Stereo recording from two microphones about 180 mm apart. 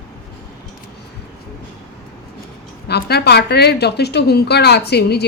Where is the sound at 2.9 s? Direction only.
65° left (ahead or behind).